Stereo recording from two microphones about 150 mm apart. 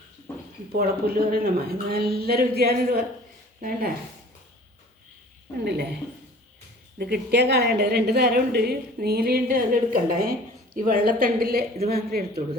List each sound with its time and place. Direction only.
0.7 s a woman's voice: 80° right
3.6 s speech: 75° right (ahead or behind)
7.0 s a woman's voice: 90° right